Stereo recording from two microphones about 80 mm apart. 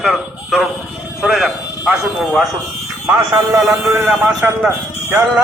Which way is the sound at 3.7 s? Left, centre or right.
Right.